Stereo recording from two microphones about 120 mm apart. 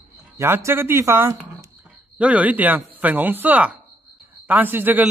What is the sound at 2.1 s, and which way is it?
A man's voice, 10° right (ahead or behind).